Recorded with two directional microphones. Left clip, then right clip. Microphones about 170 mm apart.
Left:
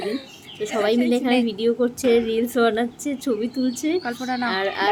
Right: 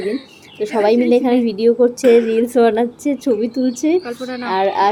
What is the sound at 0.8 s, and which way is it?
A woman's voice, 15° right (ahead or behind).